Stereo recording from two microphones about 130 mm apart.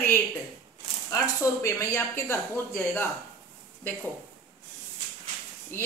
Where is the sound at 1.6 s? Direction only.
20° left (ahead or behind).